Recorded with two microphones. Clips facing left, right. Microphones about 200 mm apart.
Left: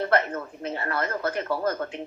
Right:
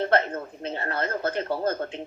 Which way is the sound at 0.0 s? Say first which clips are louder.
Right 1 dB; 30° right (ahead or behind).